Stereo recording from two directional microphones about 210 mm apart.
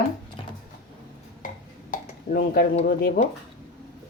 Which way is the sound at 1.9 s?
45° left (ahead or behind).